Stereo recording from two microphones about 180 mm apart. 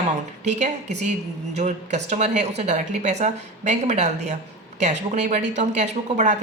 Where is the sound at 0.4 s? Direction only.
40° right (ahead or behind).